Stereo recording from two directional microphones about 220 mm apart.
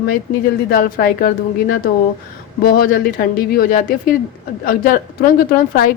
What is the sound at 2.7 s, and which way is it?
A woman's voice, 40° left (ahead or behind).